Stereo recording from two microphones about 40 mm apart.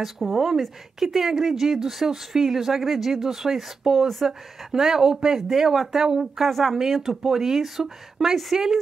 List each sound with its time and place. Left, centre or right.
0.0 s speech: centre
6.4 s speech: centre